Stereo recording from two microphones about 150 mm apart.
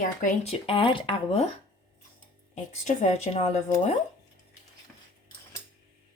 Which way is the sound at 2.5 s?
50° left (ahead or behind).